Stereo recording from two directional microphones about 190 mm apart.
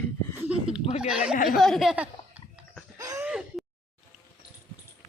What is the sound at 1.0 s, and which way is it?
Speech, 5° right (ahead or behind).